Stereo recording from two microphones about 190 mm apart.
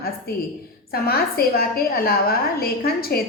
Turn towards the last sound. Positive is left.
turn(degrees=55)  # may be behind; listen again after turning